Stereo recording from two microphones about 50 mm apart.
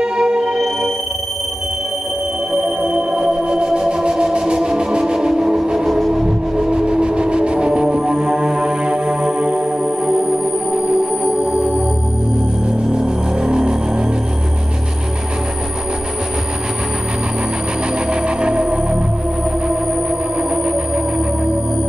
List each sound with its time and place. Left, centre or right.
0.0 s music: centre
2.8 s music: centre
5.9 s music: centre
6.2 s music: centre
12.9 s music: centre
18.1 s music: centre
20.5 s music: centre